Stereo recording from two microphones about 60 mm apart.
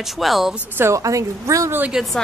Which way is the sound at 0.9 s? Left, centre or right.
Right.